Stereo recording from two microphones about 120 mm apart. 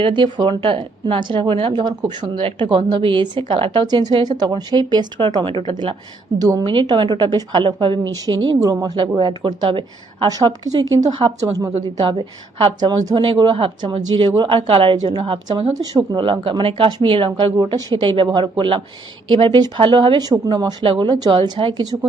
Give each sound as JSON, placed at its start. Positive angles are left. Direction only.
{"t": 0.0, "sound": "a woman's voice", "side_deg": -40}
{"t": 6.4, "sound": "a woman's voice", "side_deg": -30}
{"t": 8.4, "sound": "a woman's voice", "side_deg": -30}
{"t": 10.2, "sound": "a woman's voice", "side_deg": -35}
{"t": 13.2, "sound": "speech", "side_deg": -45}
{"t": 15.8, "sound": "a woman's voice", "side_deg": -35}